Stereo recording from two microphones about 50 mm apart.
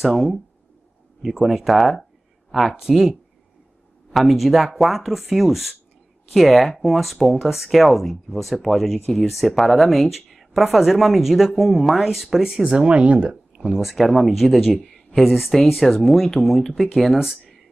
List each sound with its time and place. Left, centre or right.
0.0 s speech: centre; by 13.4 s right
13.6 s speech: centre